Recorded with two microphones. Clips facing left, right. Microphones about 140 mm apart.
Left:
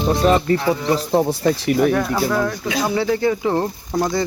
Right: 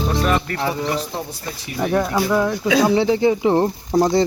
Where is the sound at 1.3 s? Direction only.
70° left (ahead or behind).